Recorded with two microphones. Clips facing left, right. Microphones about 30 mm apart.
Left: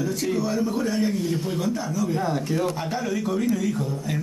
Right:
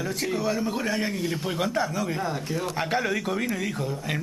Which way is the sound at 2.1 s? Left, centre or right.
Centre.